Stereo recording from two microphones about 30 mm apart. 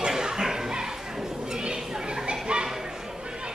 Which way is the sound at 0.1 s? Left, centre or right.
Centre.